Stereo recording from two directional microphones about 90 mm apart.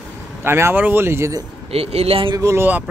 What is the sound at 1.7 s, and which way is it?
Speech, 90° right.